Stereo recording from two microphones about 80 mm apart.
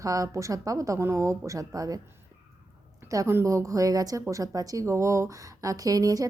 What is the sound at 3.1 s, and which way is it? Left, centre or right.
A woman's voice, right.